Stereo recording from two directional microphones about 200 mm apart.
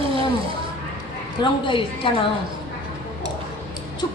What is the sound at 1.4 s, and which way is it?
Speech, 25° left (ahead or behind).